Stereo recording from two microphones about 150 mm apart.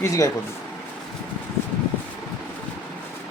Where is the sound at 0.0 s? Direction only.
20° left (ahead or behind).